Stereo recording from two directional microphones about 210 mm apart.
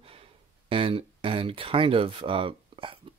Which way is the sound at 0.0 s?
25° right (ahead or behind).